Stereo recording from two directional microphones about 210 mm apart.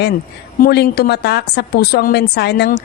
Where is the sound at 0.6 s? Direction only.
50° left (ahead or behind).